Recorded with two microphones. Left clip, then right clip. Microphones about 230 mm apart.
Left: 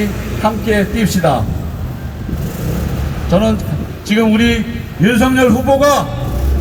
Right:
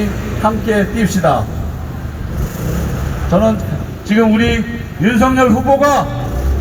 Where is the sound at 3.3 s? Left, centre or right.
Left.